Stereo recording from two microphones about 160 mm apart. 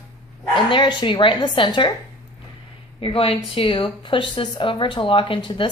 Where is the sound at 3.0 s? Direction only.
35° left (ahead or behind).